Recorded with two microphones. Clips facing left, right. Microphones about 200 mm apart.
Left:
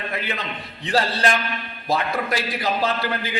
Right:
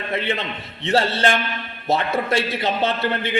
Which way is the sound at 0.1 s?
25° right (ahead or behind).